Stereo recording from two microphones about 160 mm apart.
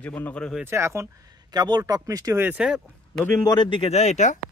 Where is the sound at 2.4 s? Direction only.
5° right (ahead or behind).